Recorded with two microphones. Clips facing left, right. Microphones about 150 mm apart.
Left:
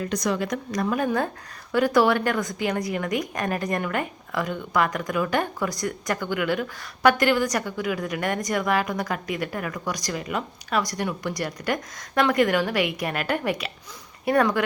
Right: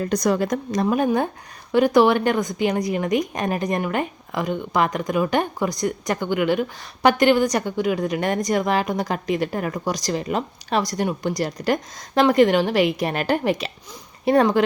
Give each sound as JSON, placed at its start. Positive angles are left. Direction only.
{"t": 0.0, "sound": "speech", "side_deg": -40}
{"t": 0.7, "sound": "a woman's voice", "side_deg": -20}